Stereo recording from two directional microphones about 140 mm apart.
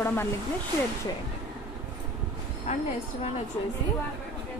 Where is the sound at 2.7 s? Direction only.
55° left (ahead or behind).